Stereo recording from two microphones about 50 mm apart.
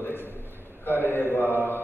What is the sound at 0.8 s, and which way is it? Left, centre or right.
Mantra, left.